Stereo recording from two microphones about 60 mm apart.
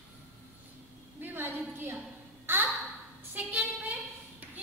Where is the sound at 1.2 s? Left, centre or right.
Right.